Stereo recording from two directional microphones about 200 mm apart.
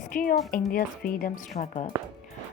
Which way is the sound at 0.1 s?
45° left (ahead or behind).